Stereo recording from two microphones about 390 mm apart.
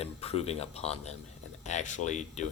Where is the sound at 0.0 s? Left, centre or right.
Centre.